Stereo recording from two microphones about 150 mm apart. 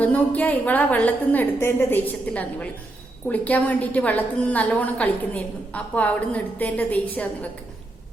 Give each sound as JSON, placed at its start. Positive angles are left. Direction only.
{"t": 0.0, "sound": "a woman's voice", "side_deg": 10}